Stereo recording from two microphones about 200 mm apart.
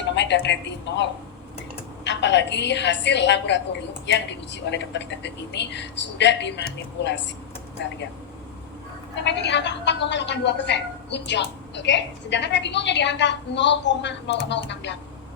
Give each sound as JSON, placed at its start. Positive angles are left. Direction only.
{"t": 0.2, "sound": "a woman's voice", "side_deg": 60}
{"t": 2.0, "sound": "a woman's voice", "side_deg": 60}
{"t": 7.8, "sound": "a woman's voice", "side_deg": 60}
{"t": 9.2, "sound": "a woman's voice", "side_deg": 60}